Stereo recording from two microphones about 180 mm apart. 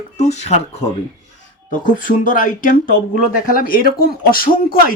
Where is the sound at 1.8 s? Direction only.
50° left (ahead or behind).